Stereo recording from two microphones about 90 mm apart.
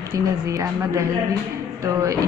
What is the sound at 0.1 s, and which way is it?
A woman's voice, 35° right (ahead or behind).